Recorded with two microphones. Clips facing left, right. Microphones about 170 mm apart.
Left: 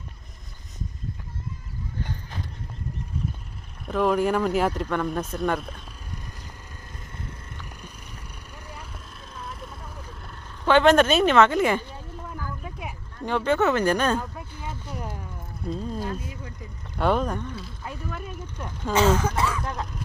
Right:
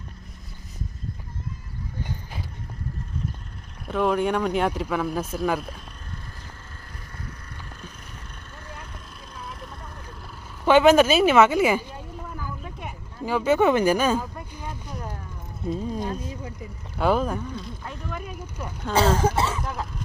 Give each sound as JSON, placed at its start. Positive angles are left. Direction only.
{"t": 2.0, "sound": "a sound", "side_deg": -10}
{"t": 3.8, "sound": "speech", "side_deg": 0}
{"t": 9.3, "sound": "vehicle", "side_deg": 0}
{"t": 10.7, "sound": "a woman's voice", "side_deg": -5}
{"t": 15.6, "sound": "speech", "side_deg": 0}
{"t": 16.0, "sound": "speech", "side_deg": -25}
{"t": 17.0, "sound": "speech", "side_deg": 0}
{"t": 18.3, "sound": "speech", "side_deg": -10}
{"t": 18.9, "sound": "speech", "side_deg": -30}
{"t": 19.6, "sound": "speech", "side_deg": 0}